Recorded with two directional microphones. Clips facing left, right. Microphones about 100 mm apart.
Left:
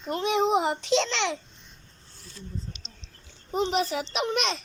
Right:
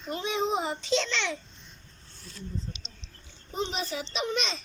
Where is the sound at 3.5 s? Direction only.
70° left (ahead or behind).